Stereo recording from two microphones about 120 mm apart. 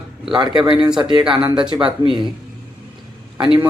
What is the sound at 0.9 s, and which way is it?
Speech, 40° right (ahead or behind).